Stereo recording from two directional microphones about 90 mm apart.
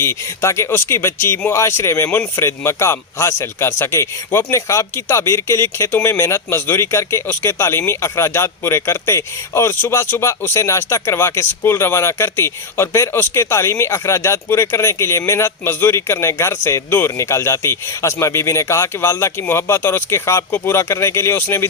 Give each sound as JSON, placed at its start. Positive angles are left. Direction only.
{"t": 0.0, "sound": "speech", "side_deg": 30}